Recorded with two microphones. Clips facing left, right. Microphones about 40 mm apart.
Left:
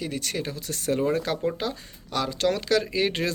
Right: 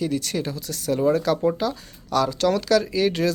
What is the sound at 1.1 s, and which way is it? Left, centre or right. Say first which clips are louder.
Speech: right 5 dB; centre.